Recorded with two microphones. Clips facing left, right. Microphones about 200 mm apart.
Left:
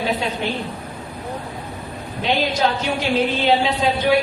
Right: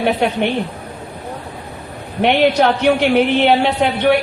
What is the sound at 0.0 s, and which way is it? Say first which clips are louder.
Speech: right 6 dB; 65° right (ahead or behind).